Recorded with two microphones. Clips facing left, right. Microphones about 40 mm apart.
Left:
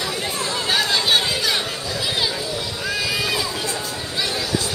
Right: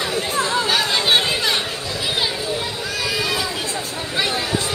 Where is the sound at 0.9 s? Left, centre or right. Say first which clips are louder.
Right 1 dB; right.